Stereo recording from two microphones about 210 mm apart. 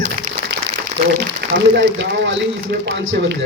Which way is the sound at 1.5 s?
55° right (ahead or behind).